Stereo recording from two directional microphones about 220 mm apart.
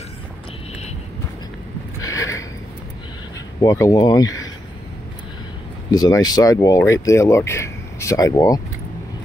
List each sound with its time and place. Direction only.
2.0 s a sound: 15° left (ahead or behind)
3.6 s speech: 15° left (ahead or behind)
5.9 s speech: 15° left (ahead or behind)